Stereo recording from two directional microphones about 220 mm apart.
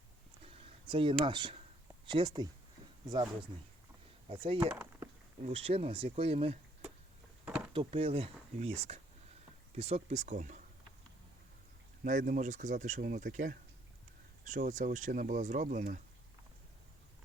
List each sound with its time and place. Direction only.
0.4 s a sound: 25° right (ahead or behind)
1.2 s speech: 20° right (ahead or behind)
4.3 s speech: 25° right (ahead or behind)
4.7 s a sound: 5° right (ahead or behind)
5.5 s speech: 25° right (ahead or behind)
7.7 s speech: 25° right (ahead or behind)
12.0 s speech: 40° right (ahead or behind)